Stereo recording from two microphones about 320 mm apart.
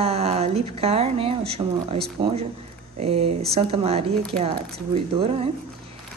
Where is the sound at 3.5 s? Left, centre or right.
Centre.